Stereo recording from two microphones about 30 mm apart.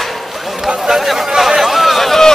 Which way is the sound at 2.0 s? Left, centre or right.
Centre.